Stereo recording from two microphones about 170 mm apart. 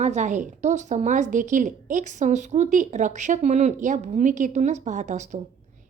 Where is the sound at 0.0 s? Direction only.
45° right (ahead or behind).